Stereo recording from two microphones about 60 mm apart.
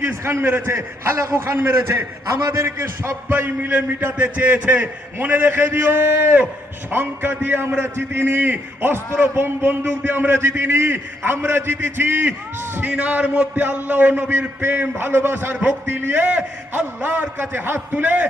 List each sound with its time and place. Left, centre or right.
0.1 s a man's voice: right
3.2 s a man's voice: right